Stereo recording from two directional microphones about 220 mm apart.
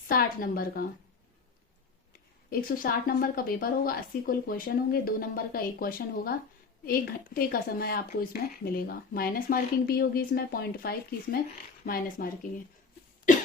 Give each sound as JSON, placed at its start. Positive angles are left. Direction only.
{"t": 0.1, "sound": "speech", "side_deg": 40}
{"t": 2.5, "sound": "speech", "side_deg": 40}